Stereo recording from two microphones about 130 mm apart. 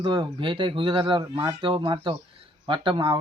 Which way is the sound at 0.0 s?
40° right (ahead or behind).